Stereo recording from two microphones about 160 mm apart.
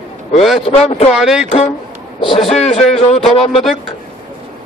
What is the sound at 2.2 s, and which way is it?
A man's voice, 35° left (ahead or behind).